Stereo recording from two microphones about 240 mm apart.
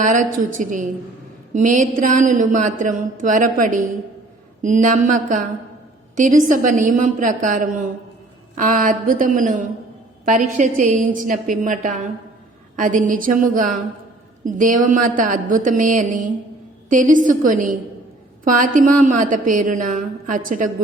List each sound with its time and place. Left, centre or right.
0.0 s a woman's voice: right